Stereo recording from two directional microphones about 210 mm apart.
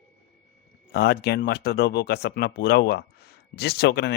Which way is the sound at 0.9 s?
50° left (ahead or behind).